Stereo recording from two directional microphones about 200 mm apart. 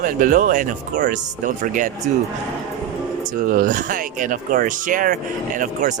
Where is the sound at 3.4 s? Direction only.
45° right (ahead or behind).